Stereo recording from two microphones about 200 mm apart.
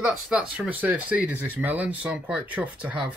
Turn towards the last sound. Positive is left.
turn(degrees=-5)  # may be behind; listen again after turning